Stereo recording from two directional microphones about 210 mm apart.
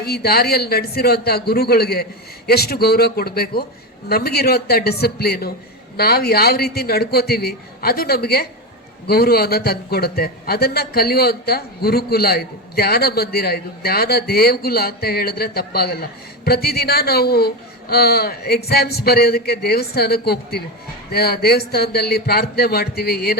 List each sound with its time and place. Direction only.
0.0 s a man's voice: 50° left (ahead or behind)